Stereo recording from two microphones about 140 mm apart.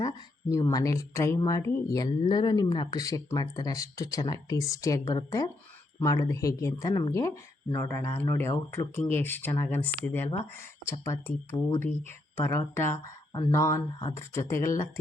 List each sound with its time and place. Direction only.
0.5 s speech: 25° left (ahead or behind)